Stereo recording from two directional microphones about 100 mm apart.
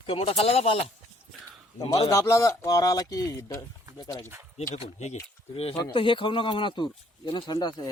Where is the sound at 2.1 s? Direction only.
30° left (ahead or behind).